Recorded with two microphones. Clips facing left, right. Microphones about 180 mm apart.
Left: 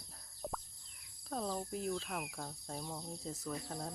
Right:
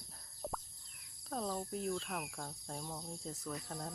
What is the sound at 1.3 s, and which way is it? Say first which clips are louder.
Speech: even; centre (ahead or behind).